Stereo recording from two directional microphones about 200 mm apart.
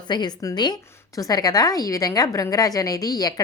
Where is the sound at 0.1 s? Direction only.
20° left (ahead or behind).